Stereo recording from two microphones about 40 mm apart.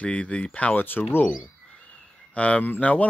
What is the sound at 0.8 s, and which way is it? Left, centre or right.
Speech, left.